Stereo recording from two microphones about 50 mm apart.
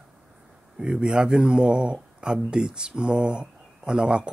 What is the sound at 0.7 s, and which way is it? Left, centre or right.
Speech, centre.